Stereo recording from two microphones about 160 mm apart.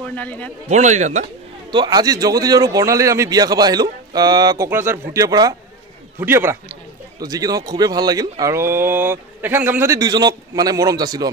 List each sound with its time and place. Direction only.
0.0 s a man's voice: 10° left (ahead or behind)
0.7 s a man's voice: 45° right (ahead or behind)
1.7 s a man's voice: 25° right (ahead or behind)